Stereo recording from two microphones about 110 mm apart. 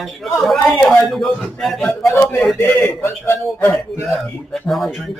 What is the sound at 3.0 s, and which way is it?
Speech, 25° left (ahead or behind).